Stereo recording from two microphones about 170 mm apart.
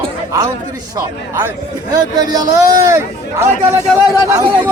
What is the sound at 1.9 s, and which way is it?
A man's voice, 25° right (ahead or behind).